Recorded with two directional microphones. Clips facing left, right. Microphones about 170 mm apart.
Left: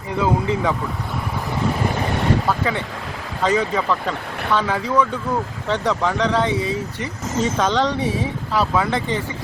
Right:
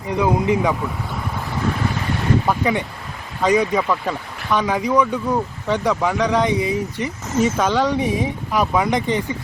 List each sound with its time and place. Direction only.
0.2 s speech: 15° right (ahead or behind)
2.5 s speech: 15° right (ahead or behind)